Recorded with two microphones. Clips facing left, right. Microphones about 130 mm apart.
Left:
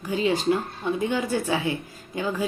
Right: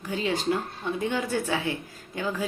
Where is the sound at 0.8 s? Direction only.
15° left (ahead or behind).